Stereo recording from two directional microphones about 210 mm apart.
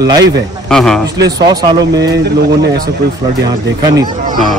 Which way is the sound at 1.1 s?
20° right (ahead or behind).